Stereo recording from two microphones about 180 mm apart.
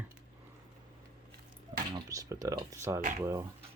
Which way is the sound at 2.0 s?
20° right (ahead or behind).